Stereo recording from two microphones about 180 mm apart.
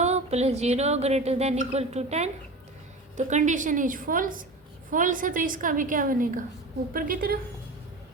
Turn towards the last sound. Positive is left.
turn(degrees=-55)  # may be behind; listen again after turning